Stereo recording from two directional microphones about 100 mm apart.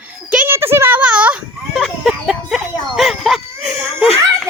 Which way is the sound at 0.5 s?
25° right (ahead or behind).